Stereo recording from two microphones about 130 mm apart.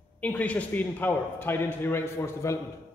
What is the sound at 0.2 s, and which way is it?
A man's voice, 10° left (ahead or behind).